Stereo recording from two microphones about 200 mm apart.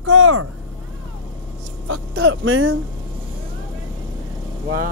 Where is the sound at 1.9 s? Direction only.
80° right.